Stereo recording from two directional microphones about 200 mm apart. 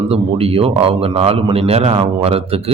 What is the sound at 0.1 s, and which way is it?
A man's voice, 30° right (ahead or behind).